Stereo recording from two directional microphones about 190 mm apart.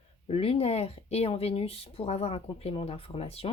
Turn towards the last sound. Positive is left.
turn(degrees=30)  # may be behind; listen again after turning